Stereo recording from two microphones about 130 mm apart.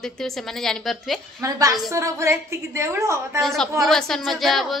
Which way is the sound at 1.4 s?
25° right (ahead or behind).